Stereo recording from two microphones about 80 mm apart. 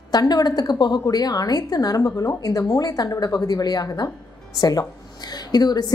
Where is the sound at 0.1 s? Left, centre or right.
Left.